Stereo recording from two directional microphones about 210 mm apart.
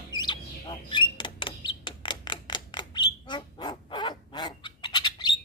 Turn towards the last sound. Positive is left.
turn(degrees=20)  # may be behind; listen again after turning